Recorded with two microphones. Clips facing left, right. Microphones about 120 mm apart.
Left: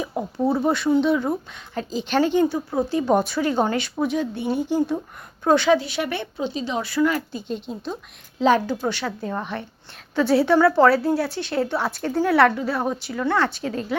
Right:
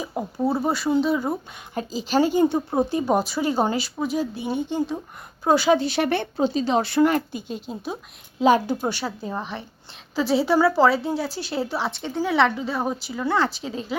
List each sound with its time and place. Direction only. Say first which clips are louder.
0.0 s a woman's voice: left 1 dB; centre (ahead or behind)
2.4 s speech: right 1 dB; 20° right (ahead or behind)
3.2 s a woman's voice: left 1 dB; 5° right (ahead or behind)
5.4 s speech: left 1 dB; 10° right (ahead or behind)
5.7 s speech: right 1 dB; 30° right (ahead or behind)
7.3 s a woman's voice: left 2 dB; 5° right (ahead or behind)